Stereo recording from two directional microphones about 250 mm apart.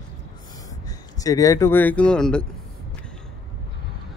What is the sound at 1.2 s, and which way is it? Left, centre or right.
A man's voice, centre.